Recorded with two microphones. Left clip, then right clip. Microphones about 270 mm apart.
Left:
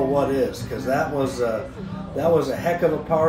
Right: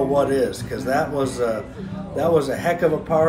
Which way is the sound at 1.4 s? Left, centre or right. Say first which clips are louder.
Right 1 dB; centre.